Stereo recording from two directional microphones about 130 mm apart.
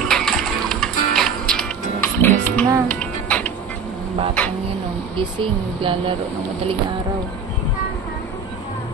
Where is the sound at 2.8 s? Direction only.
10° left (ahead or behind).